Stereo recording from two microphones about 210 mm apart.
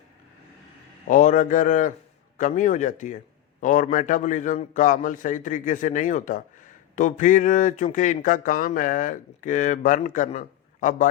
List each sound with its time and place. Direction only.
1.0 s speech: 40° left (ahead or behind)